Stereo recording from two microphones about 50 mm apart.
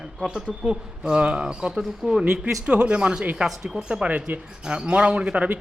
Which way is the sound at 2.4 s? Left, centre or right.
Right.